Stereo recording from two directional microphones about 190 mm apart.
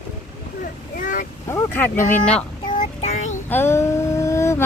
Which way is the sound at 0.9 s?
45° left (ahead or behind).